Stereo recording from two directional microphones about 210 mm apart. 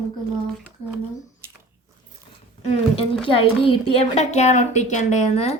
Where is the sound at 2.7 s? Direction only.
25° left (ahead or behind).